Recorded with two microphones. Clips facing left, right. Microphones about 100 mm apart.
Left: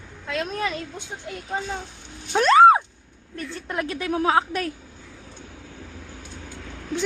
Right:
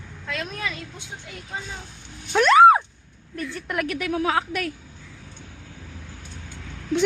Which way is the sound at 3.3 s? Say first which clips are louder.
Right 1 dB; 30° left (ahead or behind).